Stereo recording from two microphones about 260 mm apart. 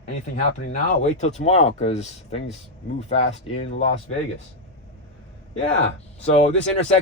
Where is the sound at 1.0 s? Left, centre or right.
Left.